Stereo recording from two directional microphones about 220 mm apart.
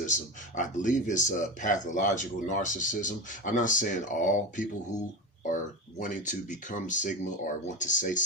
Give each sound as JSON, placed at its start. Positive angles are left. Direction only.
{"t": 0.0, "sound": "speech", "side_deg": 35}
{"t": 6.0, "sound": "speech", "side_deg": 35}